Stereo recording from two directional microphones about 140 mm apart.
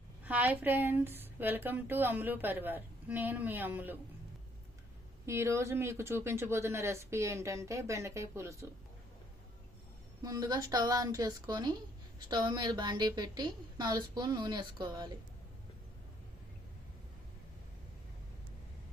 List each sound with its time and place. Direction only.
0.3 s speech: 10° right (ahead or behind)
5.2 s speech: 20° right (ahead or behind)
10.2 s a woman's voice: 30° right (ahead or behind)